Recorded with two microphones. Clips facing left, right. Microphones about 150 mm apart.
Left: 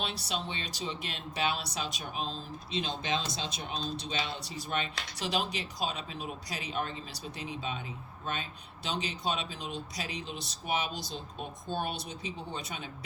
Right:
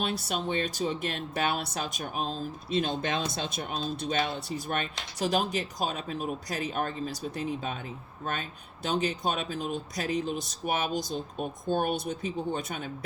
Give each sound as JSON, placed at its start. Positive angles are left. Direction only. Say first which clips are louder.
{"t": 0.0, "sound": "speech", "louder": "right 5 dB", "side_deg": -50}